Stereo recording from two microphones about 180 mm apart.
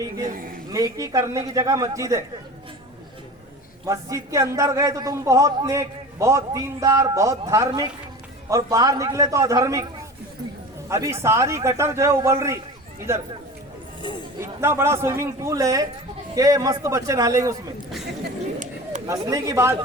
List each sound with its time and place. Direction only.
0.7 s a man's voice: 20° right (ahead or behind)
3.8 s a man's voice: 15° right (ahead or behind)
10.8 s a man's voice: 15° right (ahead or behind)
14.3 s a man's voice: 15° right (ahead or behind)
19.0 s a man's voice: 20° right (ahead or behind)